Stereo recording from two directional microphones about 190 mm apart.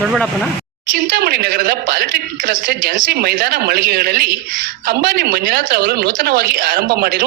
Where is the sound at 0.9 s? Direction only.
55° right (ahead or behind).